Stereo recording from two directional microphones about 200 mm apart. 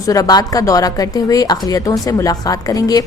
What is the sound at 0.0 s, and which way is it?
A woman's voice, 15° left (ahead or behind).